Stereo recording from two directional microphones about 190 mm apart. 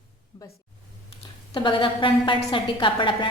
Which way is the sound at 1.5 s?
25° left (ahead or behind).